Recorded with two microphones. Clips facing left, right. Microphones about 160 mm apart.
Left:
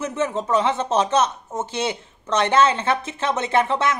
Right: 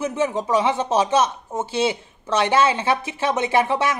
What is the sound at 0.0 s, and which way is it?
Speech, 10° right (ahead or behind).